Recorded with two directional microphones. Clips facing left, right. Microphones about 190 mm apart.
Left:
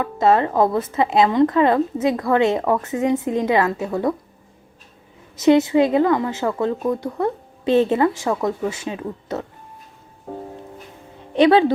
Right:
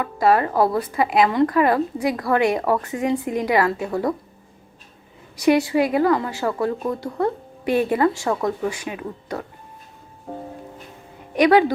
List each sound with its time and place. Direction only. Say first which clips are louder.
0.0 s speech: left 1 dB; 25° left (ahead or behind)
5.4 s speech: left 3 dB; 20° left (ahead or behind)
11.3 s speech: left 1 dB; 25° left (ahead or behind)